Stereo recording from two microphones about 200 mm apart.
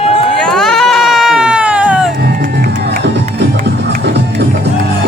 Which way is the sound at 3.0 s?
60° right (ahead or behind).